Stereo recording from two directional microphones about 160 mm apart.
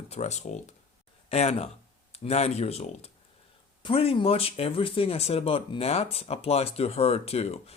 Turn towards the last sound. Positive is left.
turn(degrees=40)  # may be behind; listen again after turning